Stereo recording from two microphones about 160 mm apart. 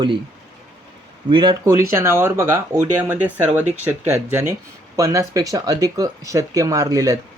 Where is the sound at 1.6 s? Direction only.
15° right (ahead or behind).